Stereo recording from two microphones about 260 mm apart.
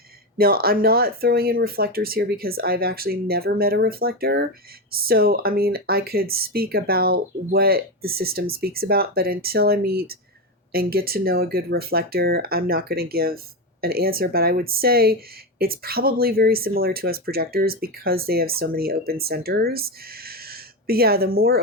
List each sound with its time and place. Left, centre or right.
0.3 s speech: right